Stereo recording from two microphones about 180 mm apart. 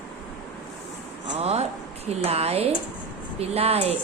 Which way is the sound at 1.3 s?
35° right (ahead or behind).